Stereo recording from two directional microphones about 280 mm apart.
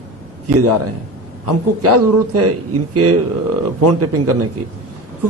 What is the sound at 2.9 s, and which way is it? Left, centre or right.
A man's voice, right.